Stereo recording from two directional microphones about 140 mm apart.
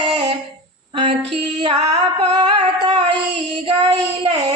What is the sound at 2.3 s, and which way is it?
Music, 35° right (ahead or behind).